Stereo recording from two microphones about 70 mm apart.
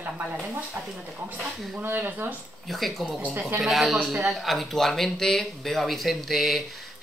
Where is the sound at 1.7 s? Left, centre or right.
Right.